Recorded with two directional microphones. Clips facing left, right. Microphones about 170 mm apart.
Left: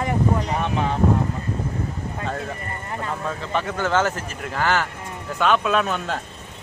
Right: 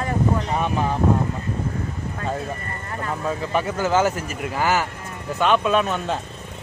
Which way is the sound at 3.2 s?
10° right (ahead or behind).